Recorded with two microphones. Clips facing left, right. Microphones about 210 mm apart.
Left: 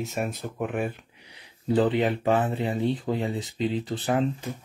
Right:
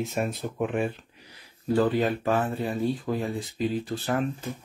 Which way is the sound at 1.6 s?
20° left (ahead or behind).